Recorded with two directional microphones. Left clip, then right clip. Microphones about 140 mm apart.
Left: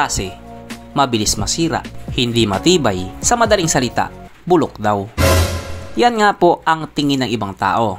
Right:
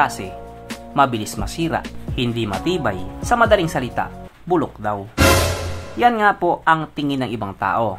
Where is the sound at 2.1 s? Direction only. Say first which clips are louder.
Left 7 dB; 50° left (ahead or behind).